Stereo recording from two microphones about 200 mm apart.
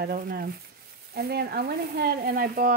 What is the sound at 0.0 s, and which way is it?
Speech, 50° right (ahead or behind).